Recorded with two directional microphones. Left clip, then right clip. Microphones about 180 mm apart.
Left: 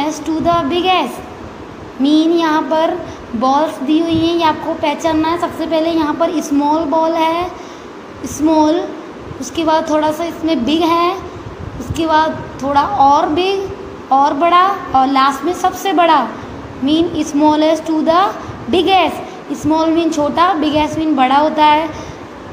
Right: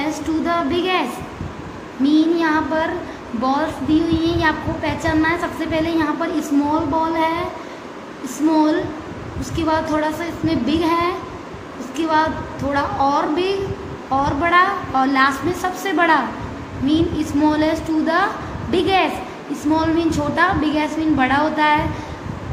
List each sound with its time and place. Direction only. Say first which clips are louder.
0.5 s a woman's voice: left 7 dB; 25° left (ahead or behind)
2.0 s a woman's voice: left 4 dB; 25° left (ahead or behind)
8.5 s a woman's voice: left 5 dB; 20° left (ahead or behind)